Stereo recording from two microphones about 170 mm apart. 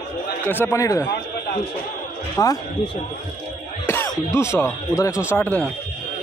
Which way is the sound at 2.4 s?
20° left (ahead or behind).